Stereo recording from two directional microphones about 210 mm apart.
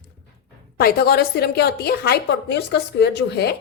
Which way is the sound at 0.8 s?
50° left (ahead or behind).